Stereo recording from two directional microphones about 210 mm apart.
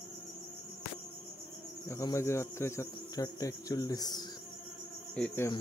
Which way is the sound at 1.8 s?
15° left (ahead or behind).